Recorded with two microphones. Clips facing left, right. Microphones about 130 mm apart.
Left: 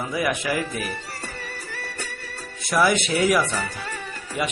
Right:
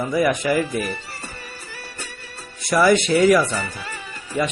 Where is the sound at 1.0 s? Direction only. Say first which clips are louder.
Left 2 dB; 60° left (ahead or behind).